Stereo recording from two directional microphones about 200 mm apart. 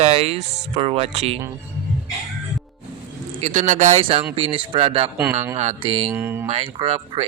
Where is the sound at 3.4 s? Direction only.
35° right (ahead or behind).